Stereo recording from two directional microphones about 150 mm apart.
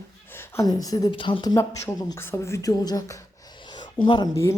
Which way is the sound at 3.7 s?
30° left (ahead or behind).